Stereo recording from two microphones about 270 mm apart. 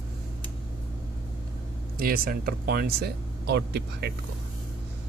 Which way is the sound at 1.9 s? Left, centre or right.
Right.